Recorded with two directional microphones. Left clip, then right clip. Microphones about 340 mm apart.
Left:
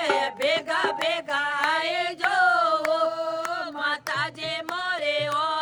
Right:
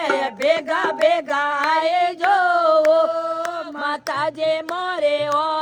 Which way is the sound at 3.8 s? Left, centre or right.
Centre.